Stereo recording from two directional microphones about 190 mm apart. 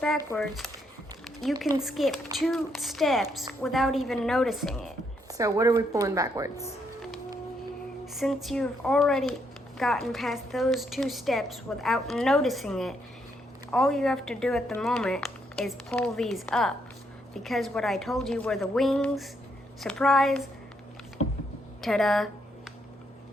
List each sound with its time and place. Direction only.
0.3 s a woman's voice: centre (ahead or behind)
1.2 s a sound: centre (ahead or behind)
1.8 s a woman's voice: centre (ahead or behind)
5.3 s a woman's voice: 15° right (ahead or behind)
8.0 s a woman's voice: centre (ahead or behind)
21.8 s speech: centre (ahead or behind)